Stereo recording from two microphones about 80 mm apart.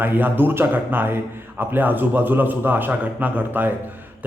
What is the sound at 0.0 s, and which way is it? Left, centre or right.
A man's voice, right.